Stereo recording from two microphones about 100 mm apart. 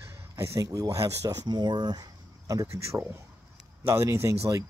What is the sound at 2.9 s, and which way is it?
Speech, 20° right (ahead or behind).